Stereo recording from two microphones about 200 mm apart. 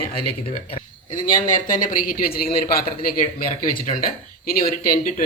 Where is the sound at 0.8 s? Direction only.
40° left (ahead or behind).